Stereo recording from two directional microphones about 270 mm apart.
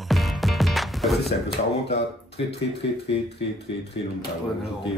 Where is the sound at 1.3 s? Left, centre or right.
Left.